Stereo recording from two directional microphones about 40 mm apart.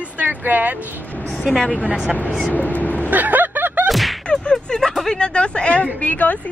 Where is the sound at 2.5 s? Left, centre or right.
Left.